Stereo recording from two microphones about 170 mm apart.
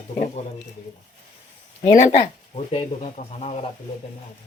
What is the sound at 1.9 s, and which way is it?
Speech, 40° left (ahead or behind).